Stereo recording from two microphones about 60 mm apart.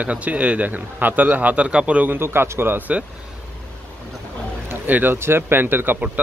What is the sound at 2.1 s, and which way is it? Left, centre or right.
Speech, right.